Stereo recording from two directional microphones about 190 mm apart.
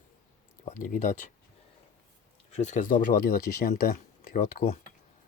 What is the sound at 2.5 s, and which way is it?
Speech, 40° left (ahead or behind).